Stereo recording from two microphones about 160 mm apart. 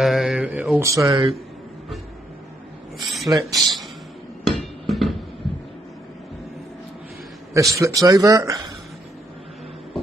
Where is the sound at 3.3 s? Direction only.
20° right (ahead or behind).